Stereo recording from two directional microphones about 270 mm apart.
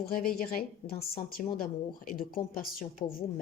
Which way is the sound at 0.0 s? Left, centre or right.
Left.